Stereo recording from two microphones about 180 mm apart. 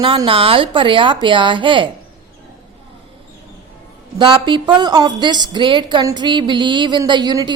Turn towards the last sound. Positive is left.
turn(degrees=-20)  # may be behind; listen again after turning